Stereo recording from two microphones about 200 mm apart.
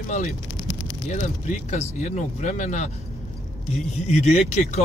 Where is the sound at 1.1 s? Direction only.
35° left (ahead or behind).